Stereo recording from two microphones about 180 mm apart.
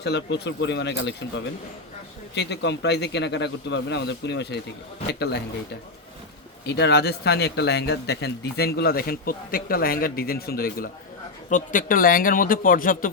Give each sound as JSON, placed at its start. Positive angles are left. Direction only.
{"t": 0.0, "sound": "a man's voice", "side_deg": 70}
{"t": 2.3, "sound": "a man's voice", "side_deg": 70}
{"t": 6.7, "sound": "speech", "side_deg": 70}
{"t": 11.4, "sound": "speech", "side_deg": 45}